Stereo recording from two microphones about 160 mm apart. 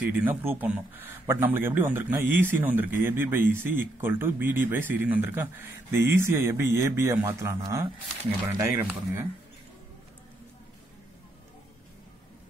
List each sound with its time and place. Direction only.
0.0 s speech: 10° right (ahead or behind)